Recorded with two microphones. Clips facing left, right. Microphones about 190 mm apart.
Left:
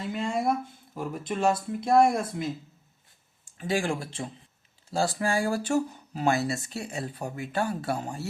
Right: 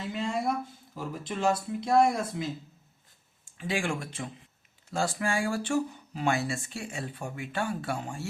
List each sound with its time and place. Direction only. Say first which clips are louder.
0.1 s speech: left 3 dB; 50° left (ahead or behind)
3.4 s speech: left 3 dB; 40° left (ahead or behind)